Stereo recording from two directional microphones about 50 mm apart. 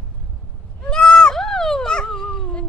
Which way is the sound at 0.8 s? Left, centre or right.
Centre.